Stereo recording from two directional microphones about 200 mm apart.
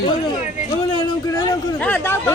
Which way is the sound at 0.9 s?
25° left (ahead or behind).